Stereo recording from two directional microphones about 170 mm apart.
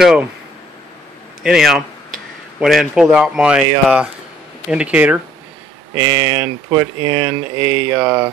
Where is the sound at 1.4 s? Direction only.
5° right (ahead or behind).